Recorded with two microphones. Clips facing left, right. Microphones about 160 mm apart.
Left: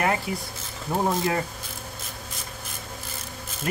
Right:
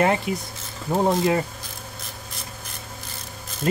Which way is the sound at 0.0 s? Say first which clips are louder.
Right 4 dB; 20° right (ahead or behind).